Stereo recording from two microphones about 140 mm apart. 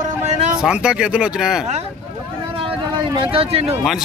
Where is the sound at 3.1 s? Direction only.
40° right (ahead or behind).